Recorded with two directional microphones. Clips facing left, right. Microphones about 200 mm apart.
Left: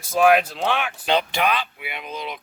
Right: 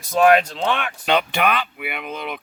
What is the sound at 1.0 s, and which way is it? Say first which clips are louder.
Speech: right 2 dB; 60° right (ahead or behind).